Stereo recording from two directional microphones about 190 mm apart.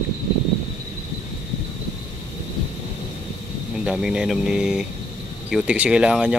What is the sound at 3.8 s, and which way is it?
Speech, 5° right (ahead or behind).